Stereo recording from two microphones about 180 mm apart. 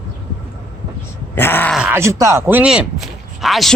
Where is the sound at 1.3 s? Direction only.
10° left (ahead or behind).